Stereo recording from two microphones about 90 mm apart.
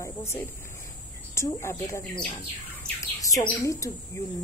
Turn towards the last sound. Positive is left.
turn(degrees=35)  # may be behind; listen again after turning